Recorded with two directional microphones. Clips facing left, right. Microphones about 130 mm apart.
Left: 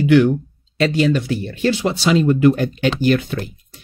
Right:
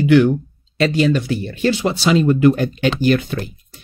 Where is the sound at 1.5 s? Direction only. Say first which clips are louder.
Right 1 dB; 25° right (ahead or behind).